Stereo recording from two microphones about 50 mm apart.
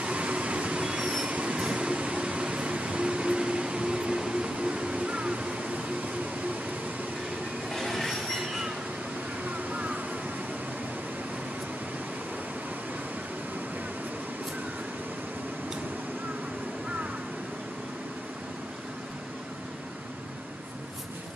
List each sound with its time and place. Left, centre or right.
0.0 s train: right
7.7 s train wheels squealing: centre
9.5 s vehicle: right